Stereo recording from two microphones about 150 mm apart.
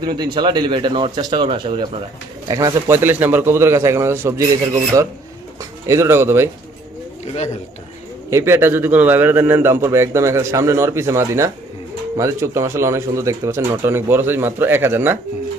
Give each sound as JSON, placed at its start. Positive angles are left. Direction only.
{"t": 0.0, "sound": "speech", "side_deg": -30}
{"t": 2.5, "sound": "a man's voice", "side_deg": -25}
{"t": 5.8, "sound": "a man's voice", "side_deg": -20}
{"t": 8.3, "sound": "a man's voice", "side_deg": -20}